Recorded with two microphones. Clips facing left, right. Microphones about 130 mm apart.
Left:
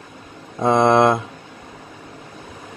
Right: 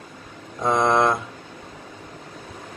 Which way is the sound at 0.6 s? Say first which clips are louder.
Left 5 dB; 30° left (ahead or behind).